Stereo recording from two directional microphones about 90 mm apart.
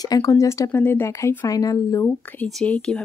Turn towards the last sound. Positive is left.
turn(degrees=10)  # may be behind; listen again after turning